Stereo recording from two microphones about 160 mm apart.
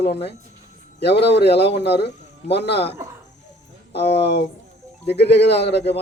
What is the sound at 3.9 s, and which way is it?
Speech, 90° left.